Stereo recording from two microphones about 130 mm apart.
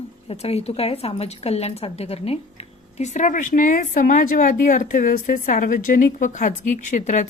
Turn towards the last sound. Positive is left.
turn(degrees=70)  # may be behind; listen again after turning